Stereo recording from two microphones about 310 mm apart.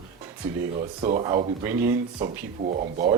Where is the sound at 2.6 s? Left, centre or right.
Right.